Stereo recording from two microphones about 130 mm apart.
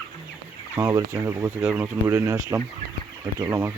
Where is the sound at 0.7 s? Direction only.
25° right (ahead or behind).